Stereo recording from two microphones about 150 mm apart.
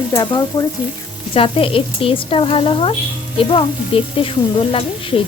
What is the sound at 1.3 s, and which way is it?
Speech, 40° left (ahead or behind).